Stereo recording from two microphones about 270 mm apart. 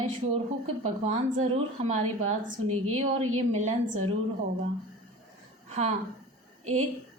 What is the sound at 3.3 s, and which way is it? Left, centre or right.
Speech, right.